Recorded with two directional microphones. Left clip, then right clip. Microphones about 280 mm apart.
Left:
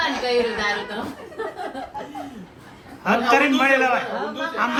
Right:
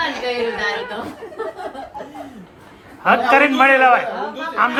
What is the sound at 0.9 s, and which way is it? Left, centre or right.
A man's voice, centre.